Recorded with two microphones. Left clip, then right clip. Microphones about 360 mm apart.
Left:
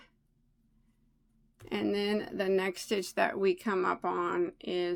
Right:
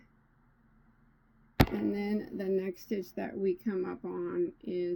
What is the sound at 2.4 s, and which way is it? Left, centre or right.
Speech, centre.